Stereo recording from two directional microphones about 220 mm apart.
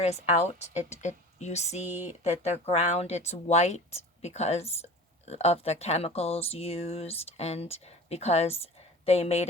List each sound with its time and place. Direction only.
0.0 s speech: 30° left (ahead or behind)
1.9 s speech: 10° right (ahead or behind)
2.2 s speech: 30° left (ahead or behind)